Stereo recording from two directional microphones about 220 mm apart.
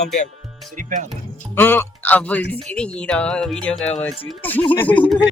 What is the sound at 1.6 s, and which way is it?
Speech, 10° left (ahead or behind).